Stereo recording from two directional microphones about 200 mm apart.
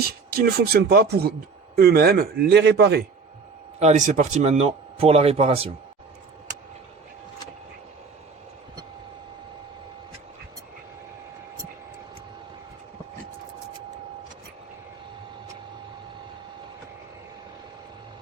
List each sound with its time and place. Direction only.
0.0 s speech: 50° right (ahead or behind)
3.8 s speech: 35° right (ahead or behind)